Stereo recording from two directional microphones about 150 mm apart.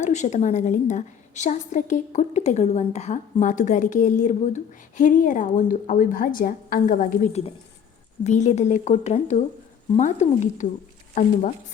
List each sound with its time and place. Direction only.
0.0 s a woman's voice: 50° left (ahead or behind)
8.2 s a woman's voice: 50° left (ahead or behind)